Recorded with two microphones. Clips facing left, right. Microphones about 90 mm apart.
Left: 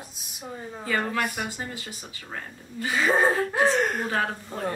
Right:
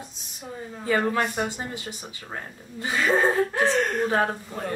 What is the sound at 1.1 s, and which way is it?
Speech, 25° right (ahead or behind).